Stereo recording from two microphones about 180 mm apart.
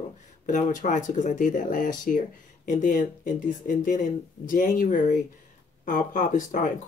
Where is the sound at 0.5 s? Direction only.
45° left (ahead or behind).